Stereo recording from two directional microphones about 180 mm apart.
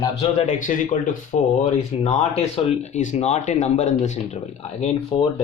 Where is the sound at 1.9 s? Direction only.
35° left (ahead or behind).